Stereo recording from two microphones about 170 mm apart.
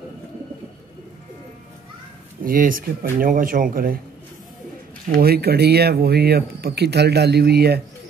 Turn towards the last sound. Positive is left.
turn(degrees=-70)  # may be behind; listen again after turning